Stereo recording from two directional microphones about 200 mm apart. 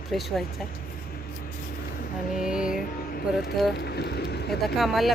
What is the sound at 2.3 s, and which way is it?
Speech, 5° right (ahead or behind).